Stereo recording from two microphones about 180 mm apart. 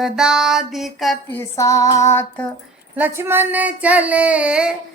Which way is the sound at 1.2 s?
15° left (ahead or behind).